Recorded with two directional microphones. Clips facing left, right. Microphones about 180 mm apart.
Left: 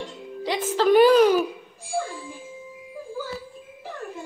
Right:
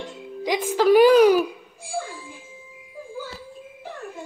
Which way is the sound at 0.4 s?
10° right (ahead or behind).